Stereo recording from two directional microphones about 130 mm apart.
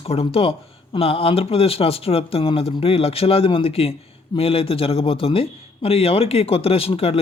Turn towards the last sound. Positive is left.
turn(degrees=45)  # may be behind; listen again after turning